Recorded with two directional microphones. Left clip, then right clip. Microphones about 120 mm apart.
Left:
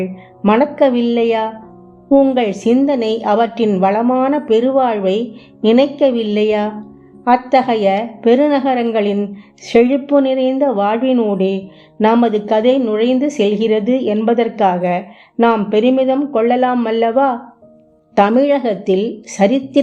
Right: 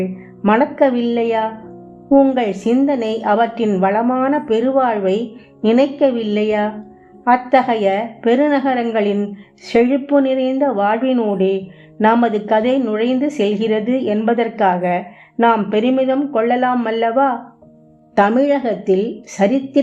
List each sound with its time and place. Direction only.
0.0 s a woman's voice: 25° left (ahead or behind)
18.1 s a woman's voice: 15° left (ahead or behind)